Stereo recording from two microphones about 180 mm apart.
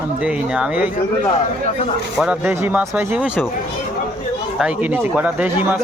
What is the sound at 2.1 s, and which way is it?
Speech, 5° right (ahead or behind).